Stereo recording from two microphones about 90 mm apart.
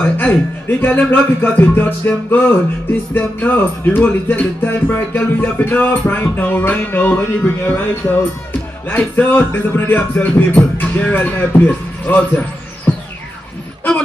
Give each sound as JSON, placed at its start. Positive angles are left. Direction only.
{"t": 0.2, "sound": "speech", "side_deg": 20}
{"t": 12.9, "sound": "music", "side_deg": 20}